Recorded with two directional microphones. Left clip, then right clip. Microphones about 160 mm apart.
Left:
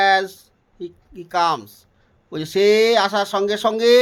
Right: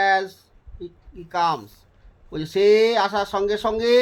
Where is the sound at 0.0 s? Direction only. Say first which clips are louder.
Left 3 dB; 50° left (ahead or behind).